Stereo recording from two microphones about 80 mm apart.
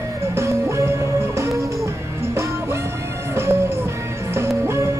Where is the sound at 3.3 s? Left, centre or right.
Right.